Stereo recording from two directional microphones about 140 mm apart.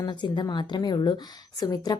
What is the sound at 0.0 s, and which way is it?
A woman's voice, 30° left (ahead or behind).